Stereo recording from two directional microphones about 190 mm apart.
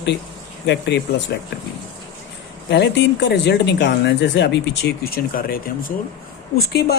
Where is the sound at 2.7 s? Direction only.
65° left (ahead or behind).